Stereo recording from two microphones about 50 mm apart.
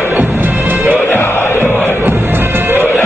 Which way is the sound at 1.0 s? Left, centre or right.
Left.